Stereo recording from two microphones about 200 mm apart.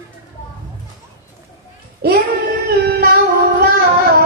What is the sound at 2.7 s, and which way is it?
Child singing, 55° right (ahead or behind).